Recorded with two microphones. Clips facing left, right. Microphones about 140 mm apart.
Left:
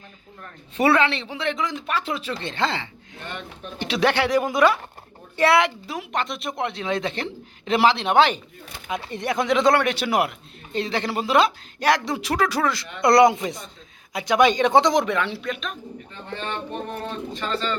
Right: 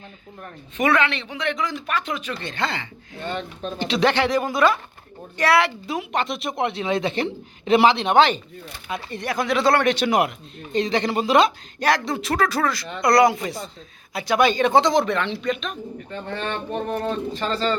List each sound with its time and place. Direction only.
0.8 s speech: 35° left (ahead or behind)
3.8 s speech: 10° left (ahead or behind)
5.9 s speech: centre (ahead or behind)
9.0 s speech: 20° left (ahead or behind); by 15.8 s centre (ahead or behind)
16.9 s speech: 40° right (ahead or behind)